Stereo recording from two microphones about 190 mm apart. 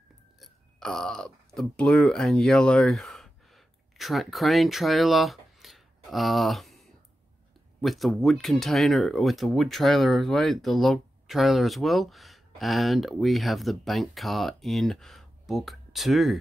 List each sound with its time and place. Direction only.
0.4 s speech: 5° left (ahead or behind)